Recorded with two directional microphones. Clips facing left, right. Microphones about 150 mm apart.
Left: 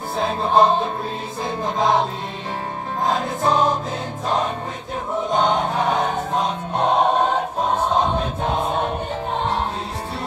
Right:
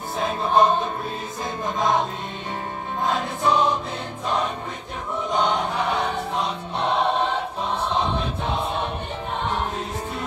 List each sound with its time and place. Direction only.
0.2 s music: 30° left (ahead or behind)
1.8 s music: 35° left (ahead or behind)
3.1 s music: 40° left (ahead or behind)
5.3 s choir: 40° left (ahead or behind)
9.4 s music: 35° left (ahead or behind)